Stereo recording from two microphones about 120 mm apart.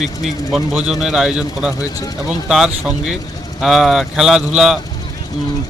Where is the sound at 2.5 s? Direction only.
5° right (ahead or behind).